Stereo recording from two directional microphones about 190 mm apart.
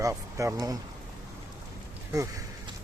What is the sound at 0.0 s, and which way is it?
Speech, 15° right (ahead or behind).